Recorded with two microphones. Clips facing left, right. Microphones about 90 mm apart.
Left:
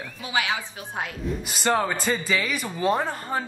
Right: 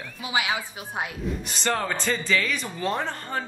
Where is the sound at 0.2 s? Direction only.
15° right (ahead or behind).